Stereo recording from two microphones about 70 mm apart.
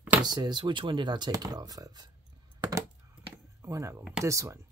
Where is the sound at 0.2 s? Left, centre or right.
Right.